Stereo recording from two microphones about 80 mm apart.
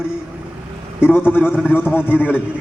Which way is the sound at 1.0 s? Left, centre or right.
Left.